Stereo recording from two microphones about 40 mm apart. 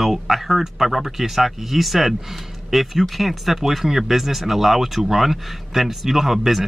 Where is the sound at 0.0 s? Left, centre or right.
Centre.